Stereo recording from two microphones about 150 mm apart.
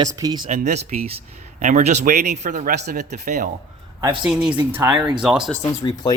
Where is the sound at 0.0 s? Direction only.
25° right (ahead or behind).